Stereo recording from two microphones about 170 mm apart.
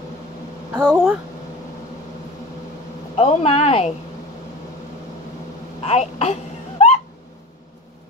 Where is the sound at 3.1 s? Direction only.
40° left (ahead or behind).